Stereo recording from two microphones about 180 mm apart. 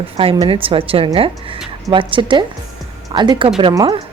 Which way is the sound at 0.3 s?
30° right (ahead or behind).